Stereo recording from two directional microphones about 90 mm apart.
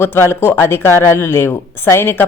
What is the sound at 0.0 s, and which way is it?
Speech, 25° left (ahead or behind).